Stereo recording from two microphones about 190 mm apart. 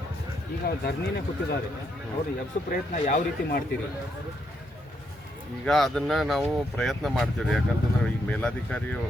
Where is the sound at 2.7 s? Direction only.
45° left (ahead or behind).